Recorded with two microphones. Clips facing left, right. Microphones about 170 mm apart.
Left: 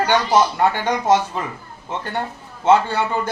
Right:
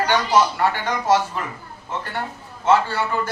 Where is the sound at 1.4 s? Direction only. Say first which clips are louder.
Left 2 dB; 20° left (ahead or behind).